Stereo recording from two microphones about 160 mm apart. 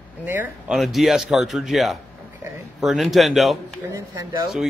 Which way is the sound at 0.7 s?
Centre (ahead or behind).